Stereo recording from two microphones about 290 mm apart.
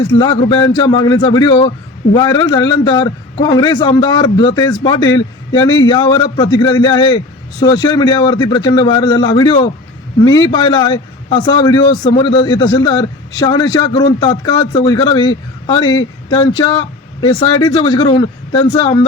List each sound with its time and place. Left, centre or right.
0.0 s a man's voice: centre